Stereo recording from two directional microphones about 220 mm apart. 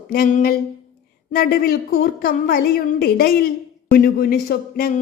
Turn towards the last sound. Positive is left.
turn(degrees=40)  # may be behind; listen again after turning